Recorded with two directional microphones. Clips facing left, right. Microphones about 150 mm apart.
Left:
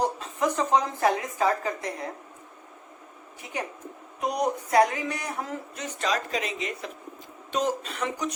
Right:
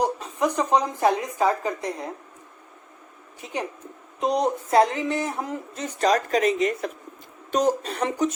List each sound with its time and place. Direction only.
0.0 s a woman's voice: 15° right (ahead or behind)
3.4 s speech: 20° right (ahead or behind)
5.8 s speech: 40° right (ahead or behind)